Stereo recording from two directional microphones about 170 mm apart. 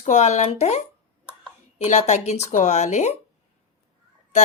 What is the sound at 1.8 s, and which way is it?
A woman's voice, 45° left (ahead or behind).